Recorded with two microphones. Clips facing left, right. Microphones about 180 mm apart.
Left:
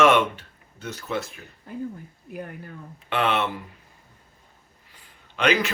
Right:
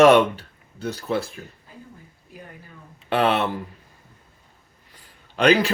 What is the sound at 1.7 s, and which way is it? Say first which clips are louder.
Speech: left 11 dB; 60° left (ahead or behind).